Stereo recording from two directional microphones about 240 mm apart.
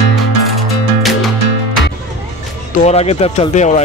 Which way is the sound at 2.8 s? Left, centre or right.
Left.